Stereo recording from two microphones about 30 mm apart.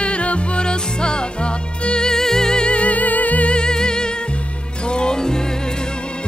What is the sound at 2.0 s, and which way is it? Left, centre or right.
Music, centre.